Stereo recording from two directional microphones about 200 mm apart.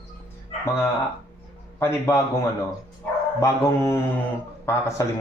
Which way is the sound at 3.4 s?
15° left (ahead or behind).